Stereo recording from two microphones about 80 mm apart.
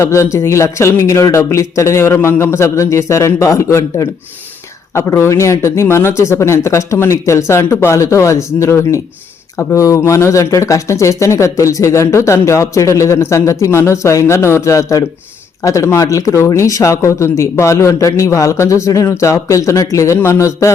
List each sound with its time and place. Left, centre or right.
0.0 s speech: left
20.1 s speech: left